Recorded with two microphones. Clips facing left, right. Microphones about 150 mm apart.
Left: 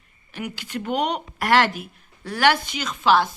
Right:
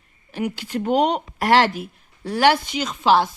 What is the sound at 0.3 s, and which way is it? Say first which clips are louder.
Speech: right 6 dB; 35° right (ahead or behind).